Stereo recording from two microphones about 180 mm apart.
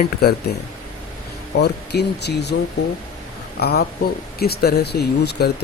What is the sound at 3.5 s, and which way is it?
Speech, 60° left (ahead or behind).